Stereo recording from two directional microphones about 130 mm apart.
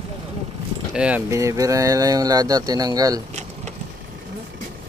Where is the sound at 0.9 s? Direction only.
10° right (ahead or behind).